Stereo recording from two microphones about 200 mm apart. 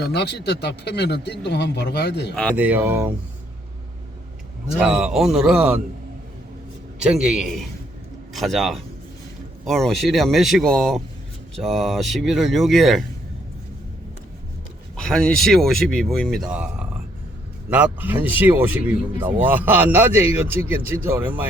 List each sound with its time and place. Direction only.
0.0 s speech: 55° left (ahead or behind)
2.3 s speech: 5° left (ahead or behind)
2.6 s speech: 10° right (ahead or behind)
4.7 s speech: 5° right (ahead or behind)
7.1 s speech: 5° right (ahead or behind)
14.9 s speech: centre (ahead or behind)